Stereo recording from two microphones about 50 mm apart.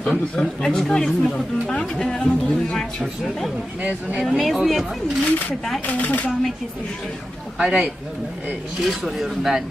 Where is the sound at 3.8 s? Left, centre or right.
Right.